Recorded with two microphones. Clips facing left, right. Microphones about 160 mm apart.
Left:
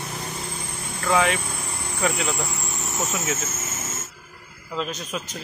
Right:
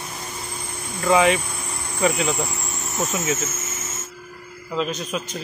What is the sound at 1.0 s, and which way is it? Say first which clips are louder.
Speech: right 4 dB; 5° right (ahead or behind).